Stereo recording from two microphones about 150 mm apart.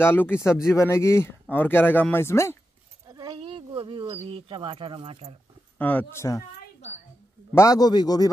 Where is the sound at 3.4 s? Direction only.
35° right (ahead or behind).